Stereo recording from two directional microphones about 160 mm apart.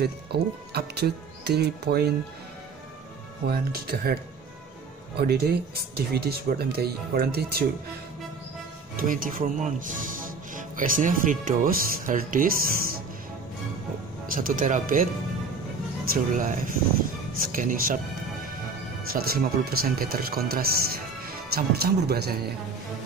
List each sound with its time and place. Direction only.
0.0 s speech: 85° right
3.4 s speech: 70° right (ahead or behind)
5.2 s speech: 75° right (ahead or behind)
8.9 s speech: 60° right (ahead or behind)
14.3 s speech: 60° right (ahead or behind)
16.1 s speech: 60° right (ahead or behind)
19.1 s speech: 70° right (ahead or behind)